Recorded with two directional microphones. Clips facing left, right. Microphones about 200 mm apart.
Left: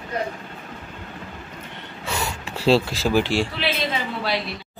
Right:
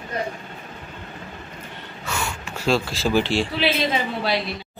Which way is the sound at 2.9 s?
10° left (ahead or behind).